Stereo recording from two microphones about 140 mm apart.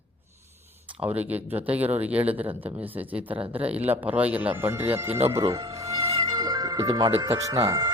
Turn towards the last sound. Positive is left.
turn(degrees=-25)  # may be behind; listen again after turning